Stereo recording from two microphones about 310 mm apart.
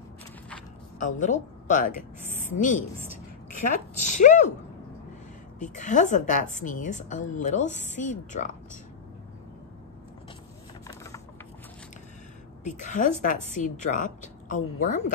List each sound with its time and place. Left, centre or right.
0.9 s a woman's voice: left
5.6 s a woman's voice: left
12.6 s a woman's voice: left